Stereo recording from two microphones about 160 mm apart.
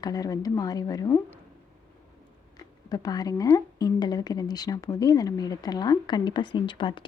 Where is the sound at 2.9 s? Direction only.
25° left (ahead or behind).